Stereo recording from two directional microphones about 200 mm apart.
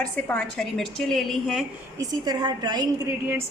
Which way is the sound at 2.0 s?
20° right (ahead or behind).